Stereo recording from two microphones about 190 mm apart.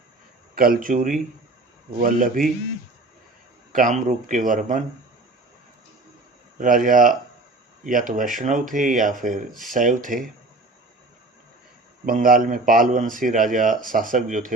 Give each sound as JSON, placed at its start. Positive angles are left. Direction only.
{"t": 0.5, "sound": "speech", "side_deg": -50}
{"t": 3.7, "sound": "speech", "side_deg": -45}
{"t": 6.6, "sound": "speech", "side_deg": -45}
{"t": 12.0, "sound": "speech", "side_deg": -45}